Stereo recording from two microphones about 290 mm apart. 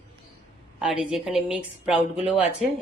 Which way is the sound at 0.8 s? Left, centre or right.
Centre.